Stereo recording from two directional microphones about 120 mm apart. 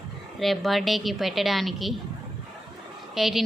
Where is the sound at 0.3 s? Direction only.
Centre (ahead or behind).